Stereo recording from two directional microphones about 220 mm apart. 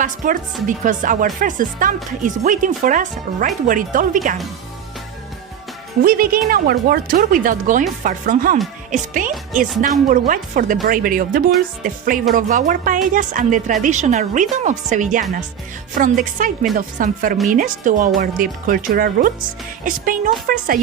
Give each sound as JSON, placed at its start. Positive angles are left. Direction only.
{"t": 0.0, "sound": "speech", "side_deg": -35}
{"t": 6.0, "sound": "speech", "side_deg": -40}